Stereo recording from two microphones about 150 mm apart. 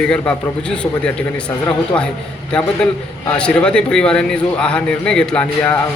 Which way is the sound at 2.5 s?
5° left (ahead or behind).